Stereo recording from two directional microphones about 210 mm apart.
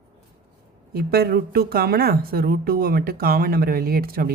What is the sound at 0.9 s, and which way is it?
Speech, 50° right (ahead or behind).